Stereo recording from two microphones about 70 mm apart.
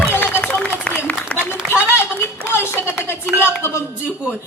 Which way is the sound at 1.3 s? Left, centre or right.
Centre.